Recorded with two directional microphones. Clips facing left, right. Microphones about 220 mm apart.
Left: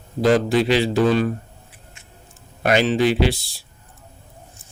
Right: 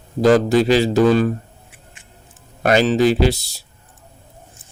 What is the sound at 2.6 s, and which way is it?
Speech, 40° right (ahead or behind).